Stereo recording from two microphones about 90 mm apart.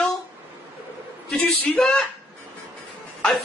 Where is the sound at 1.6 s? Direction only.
10° left (ahead or behind).